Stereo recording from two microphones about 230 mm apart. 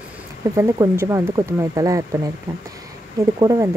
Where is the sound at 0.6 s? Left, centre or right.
Centre.